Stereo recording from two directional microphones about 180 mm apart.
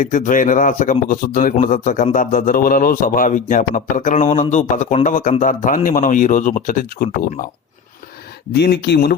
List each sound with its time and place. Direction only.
0.0 s a man's voice: 45° left (ahead or behind)
8.5 s speech: 65° left (ahead or behind)